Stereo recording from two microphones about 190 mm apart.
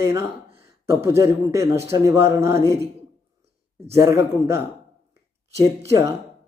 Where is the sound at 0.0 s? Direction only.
15° right (ahead or behind).